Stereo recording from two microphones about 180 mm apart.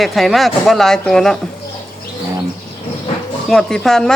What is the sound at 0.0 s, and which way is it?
Speech, centre (ahead or behind).